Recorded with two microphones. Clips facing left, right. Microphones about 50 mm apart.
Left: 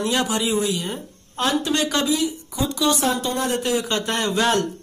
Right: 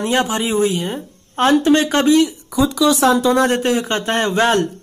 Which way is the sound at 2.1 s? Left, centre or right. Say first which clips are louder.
Right 9 dB; right.